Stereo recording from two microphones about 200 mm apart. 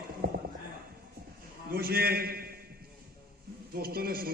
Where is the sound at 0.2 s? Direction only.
50° right (ahead or behind).